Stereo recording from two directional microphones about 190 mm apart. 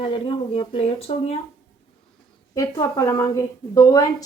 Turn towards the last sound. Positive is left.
turn(degrees=20)  # may be behind; listen again after turning